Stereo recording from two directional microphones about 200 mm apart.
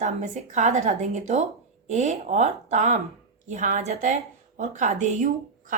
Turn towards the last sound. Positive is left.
turn(degrees=-40)  # may be behind; listen again after turning